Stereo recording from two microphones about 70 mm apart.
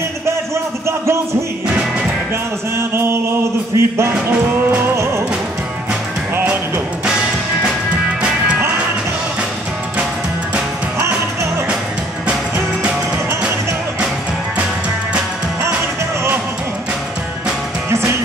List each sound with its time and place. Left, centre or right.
0.8 s music: right
2.9 s chant: right
17.8 s music: right